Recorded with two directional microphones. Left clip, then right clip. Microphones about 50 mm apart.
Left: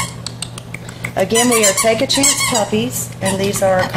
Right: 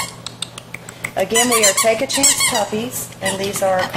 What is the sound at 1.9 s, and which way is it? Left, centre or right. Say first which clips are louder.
Speech: left 4 dB; centre.